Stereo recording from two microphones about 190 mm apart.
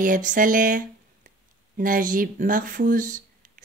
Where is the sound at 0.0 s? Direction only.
45° right (ahead or behind).